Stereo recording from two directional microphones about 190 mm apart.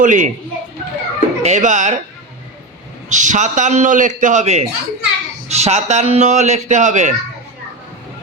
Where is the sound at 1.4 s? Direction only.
35° right (ahead or behind).